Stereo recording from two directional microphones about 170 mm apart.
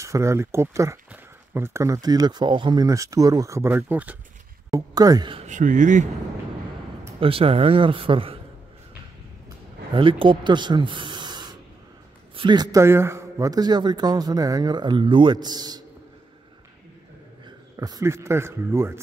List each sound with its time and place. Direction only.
0.0 s speech: 15° right (ahead or behind)
4.6 s speech: 20° right (ahead or behind)
5.4 s speech: 50° right (ahead or behind)
7.2 s speech: 35° right (ahead or behind)
9.9 s a man's voice: 30° right (ahead or behind)
17.7 s speech: 20° right (ahead or behind)